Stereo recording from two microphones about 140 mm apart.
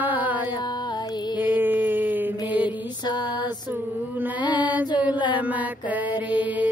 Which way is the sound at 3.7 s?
15° right (ahead or behind).